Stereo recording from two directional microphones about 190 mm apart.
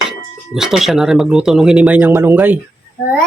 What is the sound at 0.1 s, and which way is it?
Speech, centre (ahead or behind).